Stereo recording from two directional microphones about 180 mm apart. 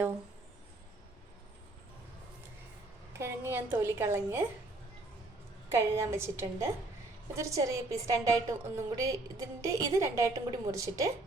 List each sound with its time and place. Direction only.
3.1 s a woman's voice: 15° right (ahead or behind)
5.6 s a woman's voice: 15° right (ahead or behind)